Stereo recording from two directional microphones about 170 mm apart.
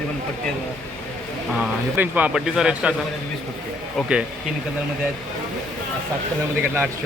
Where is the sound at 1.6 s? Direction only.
10° right (ahead or behind).